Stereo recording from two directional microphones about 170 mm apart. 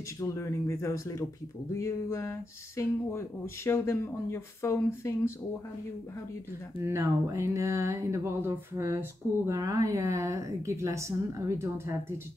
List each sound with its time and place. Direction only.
0.2 s speech: 15° left (ahead or behind)
6.8 s a woman's voice: 15° right (ahead or behind)